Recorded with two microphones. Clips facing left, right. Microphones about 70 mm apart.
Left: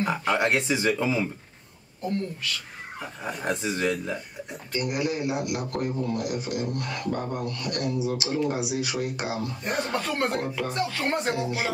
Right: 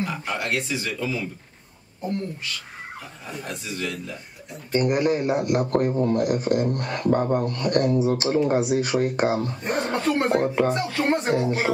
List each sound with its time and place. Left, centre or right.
0.0 s speech: left
3.4 s a man's voice: left
4.7 s speech: right
11.3 s speech: right